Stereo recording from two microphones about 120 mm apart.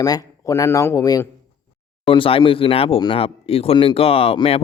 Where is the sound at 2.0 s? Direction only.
50° left (ahead or behind).